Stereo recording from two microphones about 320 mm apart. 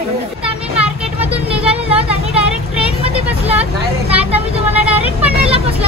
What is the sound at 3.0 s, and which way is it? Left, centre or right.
Vehicle, centre.